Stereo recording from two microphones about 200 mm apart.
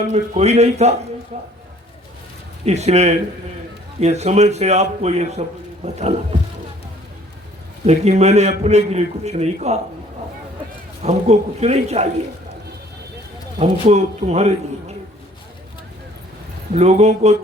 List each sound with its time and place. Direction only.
0.1 s a man's voice: 35° right (ahead or behind)
2.6 s a man's voice: 35° right (ahead or behind)
7.9 s a man's voice: 35° right (ahead or behind)
11.0 s a man's voice: 35° right (ahead or behind)
13.8 s speech: 35° right (ahead or behind)
16.7 s a man's voice: 35° right (ahead or behind)